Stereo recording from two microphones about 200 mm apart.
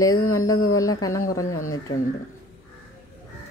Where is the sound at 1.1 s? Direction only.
90° left.